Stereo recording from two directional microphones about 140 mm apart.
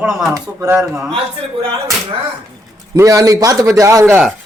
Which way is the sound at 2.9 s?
25° right (ahead or behind).